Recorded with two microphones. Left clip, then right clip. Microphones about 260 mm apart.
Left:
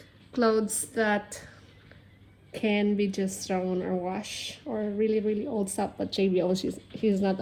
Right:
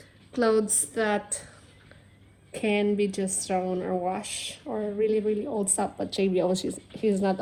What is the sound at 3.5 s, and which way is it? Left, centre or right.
Speech, right.